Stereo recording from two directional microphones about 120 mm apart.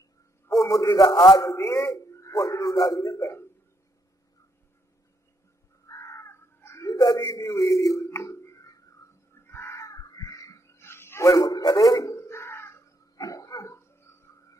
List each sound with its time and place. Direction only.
0.7 s a man's voice: 30° left (ahead or behind)
1.5 s speech: 25° left (ahead or behind)
5.9 s a sound: 25° left (ahead or behind)